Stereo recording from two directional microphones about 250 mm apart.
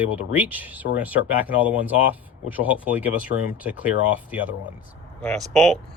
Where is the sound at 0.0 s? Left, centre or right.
Centre.